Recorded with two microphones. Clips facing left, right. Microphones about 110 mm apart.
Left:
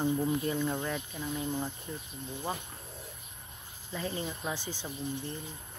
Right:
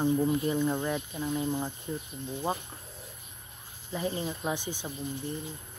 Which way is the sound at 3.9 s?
20° right (ahead or behind).